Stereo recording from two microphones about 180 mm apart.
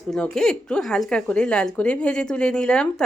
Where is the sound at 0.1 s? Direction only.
5° left (ahead or behind).